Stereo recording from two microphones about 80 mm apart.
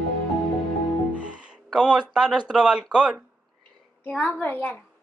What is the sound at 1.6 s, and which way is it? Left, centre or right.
Speech, centre.